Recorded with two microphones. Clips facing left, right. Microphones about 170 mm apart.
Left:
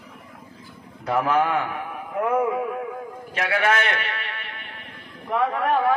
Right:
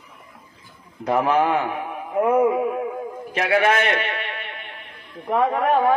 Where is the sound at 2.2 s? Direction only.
25° right (ahead or behind).